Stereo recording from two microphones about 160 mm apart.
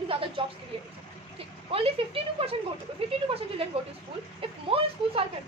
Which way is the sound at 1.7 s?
35° right (ahead or behind).